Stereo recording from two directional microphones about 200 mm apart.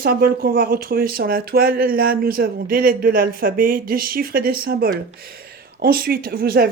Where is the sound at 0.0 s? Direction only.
45° right (ahead or behind).